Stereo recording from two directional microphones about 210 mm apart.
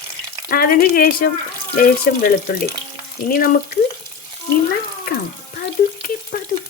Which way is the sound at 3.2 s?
45° left (ahead or behind).